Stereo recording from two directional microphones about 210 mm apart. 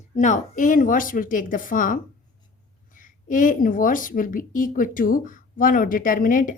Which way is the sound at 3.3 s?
40° left (ahead or behind).